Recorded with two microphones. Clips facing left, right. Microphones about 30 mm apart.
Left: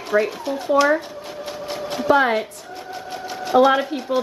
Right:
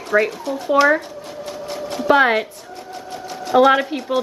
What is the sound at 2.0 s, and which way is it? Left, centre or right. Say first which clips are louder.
Speech: right 3 dB; centre.